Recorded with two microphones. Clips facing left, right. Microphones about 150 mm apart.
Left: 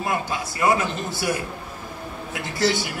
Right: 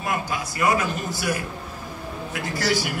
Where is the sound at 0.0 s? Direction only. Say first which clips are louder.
Left 1 dB; 25° left (ahead or behind).